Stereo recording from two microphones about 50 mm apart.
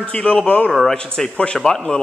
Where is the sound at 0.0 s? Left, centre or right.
Left.